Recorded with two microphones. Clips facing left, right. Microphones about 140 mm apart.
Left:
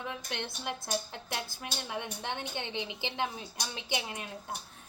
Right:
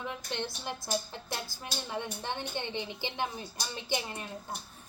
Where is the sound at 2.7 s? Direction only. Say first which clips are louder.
Even; 15° left (ahead or behind).